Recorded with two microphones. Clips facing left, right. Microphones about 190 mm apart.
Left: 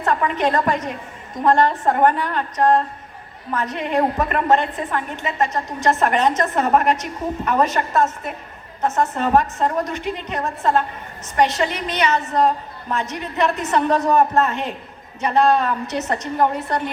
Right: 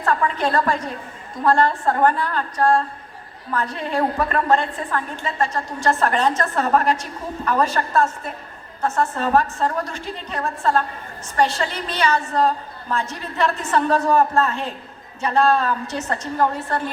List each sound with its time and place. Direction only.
0.0 s a woman's voice: 20° left (ahead or behind)